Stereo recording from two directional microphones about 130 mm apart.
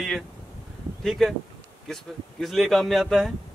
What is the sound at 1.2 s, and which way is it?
Speech, 5° left (ahead or behind).